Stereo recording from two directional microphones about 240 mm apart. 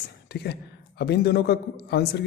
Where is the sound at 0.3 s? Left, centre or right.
Left.